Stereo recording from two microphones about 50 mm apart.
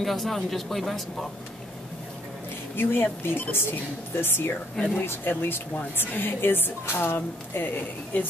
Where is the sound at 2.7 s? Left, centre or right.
Left.